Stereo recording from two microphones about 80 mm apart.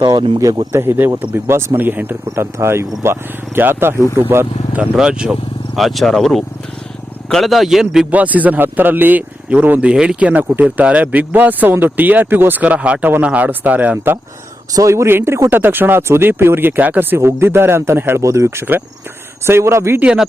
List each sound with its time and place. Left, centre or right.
0.0 s speech: right
0.3 s speech: right
0.8 s speech: right
2.3 s speech: right
4.8 s speech: centre
5.8 s a man's voice: centre
8.1 s speech: centre
9.9 s speech: centre
14.8 s speech: right
18.2 s speech: right
20.0 s speech: centre